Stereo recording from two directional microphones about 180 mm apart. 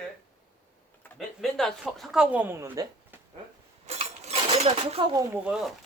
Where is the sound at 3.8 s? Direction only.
35° right (ahead or behind).